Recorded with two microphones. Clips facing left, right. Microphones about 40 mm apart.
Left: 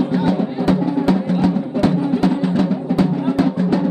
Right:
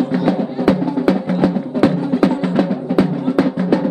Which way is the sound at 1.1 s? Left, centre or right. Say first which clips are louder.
Right 2 dB; centre.